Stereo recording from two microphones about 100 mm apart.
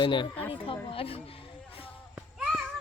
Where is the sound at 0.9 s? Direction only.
70° left (ahead or behind).